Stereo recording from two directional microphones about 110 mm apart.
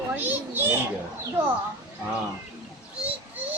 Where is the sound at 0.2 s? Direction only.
15° right (ahead or behind).